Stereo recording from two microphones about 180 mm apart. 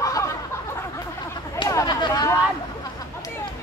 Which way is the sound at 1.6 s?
20° left (ahead or behind).